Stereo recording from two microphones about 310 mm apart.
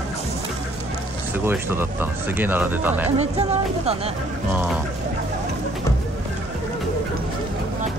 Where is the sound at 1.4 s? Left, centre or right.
Centre.